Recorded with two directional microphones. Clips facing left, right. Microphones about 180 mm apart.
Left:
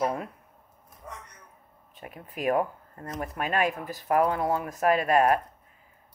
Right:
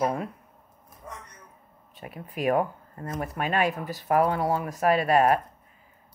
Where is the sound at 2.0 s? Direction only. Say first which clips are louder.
Right 2 dB; 35° right (ahead or behind).